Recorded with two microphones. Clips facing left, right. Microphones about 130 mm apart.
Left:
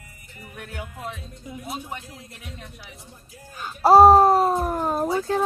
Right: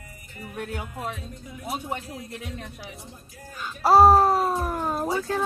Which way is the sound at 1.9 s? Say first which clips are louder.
Right 5 dB; 45° right (ahead or behind).